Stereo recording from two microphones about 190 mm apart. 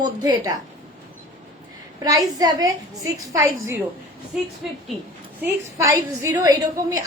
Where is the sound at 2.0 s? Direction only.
20° right (ahead or behind).